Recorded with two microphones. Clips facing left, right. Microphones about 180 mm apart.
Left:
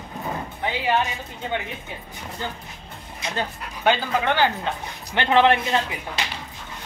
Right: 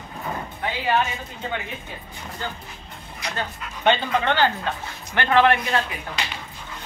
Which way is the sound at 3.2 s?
25° left (ahead or behind).